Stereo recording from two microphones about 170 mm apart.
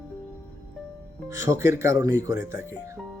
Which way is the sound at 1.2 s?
20° right (ahead or behind).